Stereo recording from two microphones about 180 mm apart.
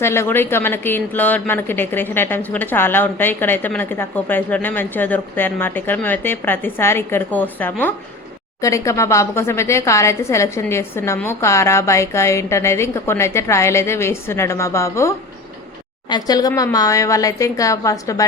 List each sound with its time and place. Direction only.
0.0 s a woman's voice: 15° left (ahead or behind)